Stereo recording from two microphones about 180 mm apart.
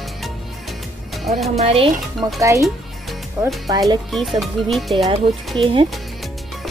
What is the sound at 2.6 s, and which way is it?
Music, centre (ahead or behind).